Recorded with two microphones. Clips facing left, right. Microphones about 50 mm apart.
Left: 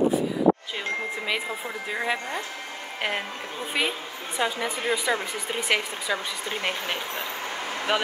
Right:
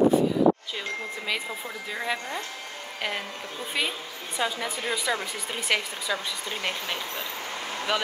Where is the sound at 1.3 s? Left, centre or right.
Centre.